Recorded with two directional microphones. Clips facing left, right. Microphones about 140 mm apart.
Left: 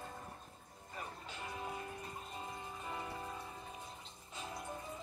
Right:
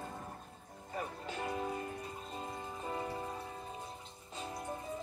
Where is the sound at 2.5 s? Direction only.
35° right (ahead or behind).